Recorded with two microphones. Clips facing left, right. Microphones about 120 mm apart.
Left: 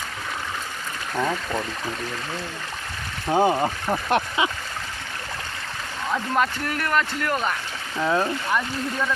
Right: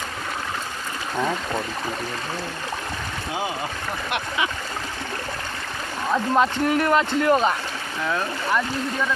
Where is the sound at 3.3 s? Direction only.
40° left (ahead or behind).